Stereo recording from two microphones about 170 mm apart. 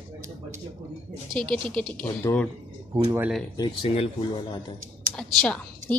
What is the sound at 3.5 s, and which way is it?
Speech, 30° left (ahead or behind).